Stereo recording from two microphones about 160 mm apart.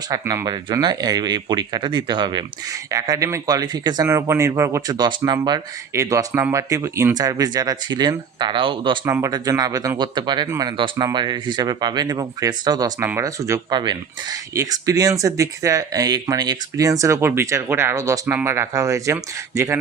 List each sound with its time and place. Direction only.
0.1 s speech: 20° right (ahead or behind)
9.0 s speech: 20° right (ahead or behind)